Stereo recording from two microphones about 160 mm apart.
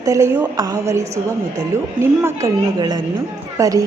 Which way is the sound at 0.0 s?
20° right (ahead or behind).